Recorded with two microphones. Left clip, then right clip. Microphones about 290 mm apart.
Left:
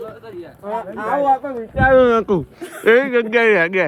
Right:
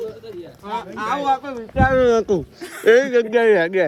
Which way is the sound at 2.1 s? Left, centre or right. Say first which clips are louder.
Left 1 dB; left.